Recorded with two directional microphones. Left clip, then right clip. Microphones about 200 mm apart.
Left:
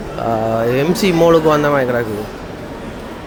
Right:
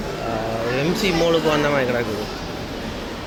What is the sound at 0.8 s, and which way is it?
Speech, 40° left (ahead or behind).